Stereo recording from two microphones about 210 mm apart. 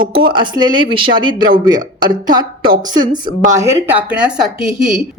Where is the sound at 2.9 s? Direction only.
20° right (ahead or behind).